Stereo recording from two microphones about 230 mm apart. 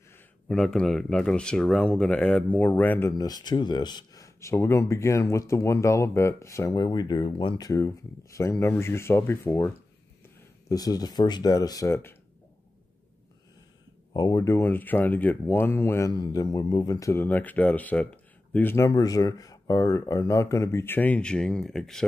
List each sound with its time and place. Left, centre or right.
0.5 s speech: centre
10.7 s speech: centre
14.1 s speech: centre